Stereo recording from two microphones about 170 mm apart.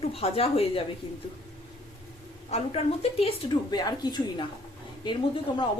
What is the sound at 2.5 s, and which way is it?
A woman's voice, 35° left (ahead or behind).